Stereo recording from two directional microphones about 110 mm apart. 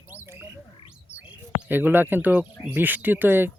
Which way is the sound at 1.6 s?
15° right (ahead or behind).